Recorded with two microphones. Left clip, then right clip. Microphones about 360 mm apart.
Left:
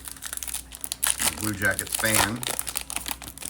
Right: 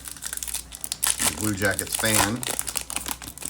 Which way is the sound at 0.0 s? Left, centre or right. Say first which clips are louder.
Right 2 dB; centre.